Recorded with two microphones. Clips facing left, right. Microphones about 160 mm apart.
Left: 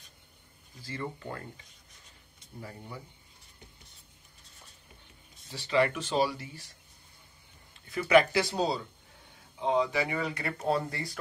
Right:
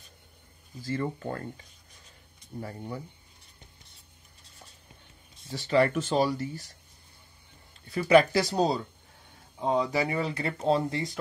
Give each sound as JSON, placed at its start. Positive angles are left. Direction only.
{"t": 0.8, "sound": "speech", "side_deg": -45}
{"t": 5.5, "sound": "speech", "side_deg": -45}
{"t": 7.9, "sound": "speech", "side_deg": -30}